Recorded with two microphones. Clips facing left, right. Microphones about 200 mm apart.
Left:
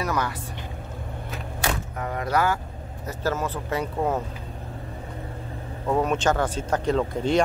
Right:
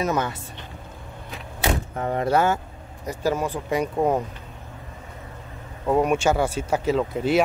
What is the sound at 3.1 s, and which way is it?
Speech, 15° right (ahead or behind).